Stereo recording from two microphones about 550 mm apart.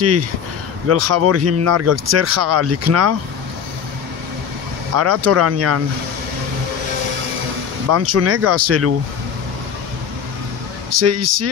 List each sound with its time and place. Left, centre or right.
0.0 s speech: right
4.9 s speech: right
7.9 s speech: right
11.0 s speech: right